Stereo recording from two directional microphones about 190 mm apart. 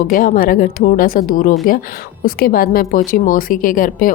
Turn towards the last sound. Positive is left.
turn(degrees=45)  # may be behind; listen again after turning